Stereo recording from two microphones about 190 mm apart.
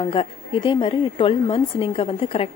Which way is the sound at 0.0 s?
30° left (ahead or behind).